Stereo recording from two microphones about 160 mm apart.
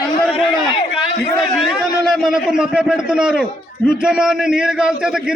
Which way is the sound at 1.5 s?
Centre (ahead or behind).